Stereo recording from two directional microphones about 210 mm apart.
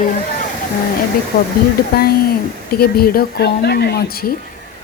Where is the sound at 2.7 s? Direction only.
45° left (ahead or behind).